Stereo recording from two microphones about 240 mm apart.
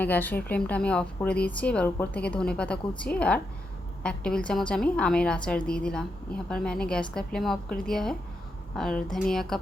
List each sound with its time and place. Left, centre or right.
0.0 s a woman's voice: centre